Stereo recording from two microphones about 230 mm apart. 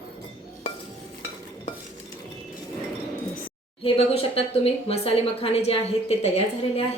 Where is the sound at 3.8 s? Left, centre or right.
Left.